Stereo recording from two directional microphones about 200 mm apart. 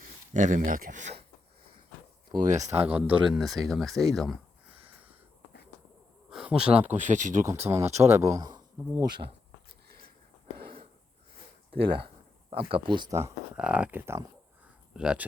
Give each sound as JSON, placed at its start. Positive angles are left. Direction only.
{"t": 0.3, "sound": "speech", "side_deg": -40}
{"t": 2.3, "sound": "speech", "side_deg": -40}
{"t": 2.6, "sound": "speech", "side_deg": -15}
{"t": 6.3, "sound": "speech", "side_deg": -5}
{"t": 7.0, "sound": "speech", "side_deg": -40}
{"t": 7.4, "sound": "speech", "side_deg": -15}
{"t": 12.0, "sound": "speech", "side_deg": -25}